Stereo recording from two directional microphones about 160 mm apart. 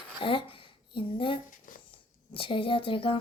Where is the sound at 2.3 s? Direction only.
35° left (ahead or behind).